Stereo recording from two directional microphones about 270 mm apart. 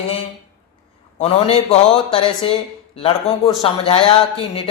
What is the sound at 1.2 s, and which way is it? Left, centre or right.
Speech, left.